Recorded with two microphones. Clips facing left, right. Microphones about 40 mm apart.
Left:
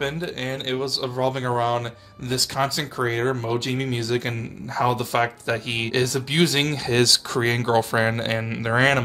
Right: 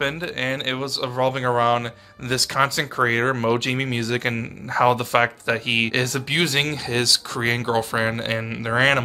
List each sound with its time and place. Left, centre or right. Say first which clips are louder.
0.0 s speech: right 3 dB; right
2.2 s speech: right 3 dB; right
2.6 s speech: right 5 dB; right
3.7 s speech: right 1 dB; right
6.3 s speech: even; right
6.7 s speech: left 2 dB; centre